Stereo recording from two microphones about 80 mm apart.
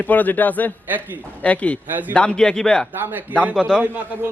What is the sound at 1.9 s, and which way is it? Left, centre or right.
Speech, right.